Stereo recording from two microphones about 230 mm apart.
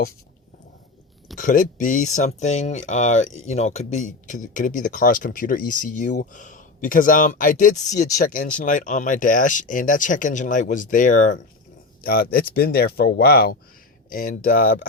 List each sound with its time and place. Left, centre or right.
1.4 s speech: left